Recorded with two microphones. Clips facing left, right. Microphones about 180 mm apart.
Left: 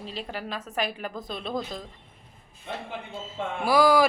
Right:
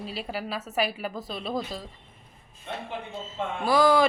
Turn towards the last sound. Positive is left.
turn(degrees=10)  # may be behind; listen again after turning